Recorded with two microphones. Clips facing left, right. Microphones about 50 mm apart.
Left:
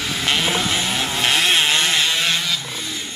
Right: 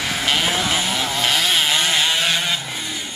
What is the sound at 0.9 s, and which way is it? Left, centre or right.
Vehicle, left.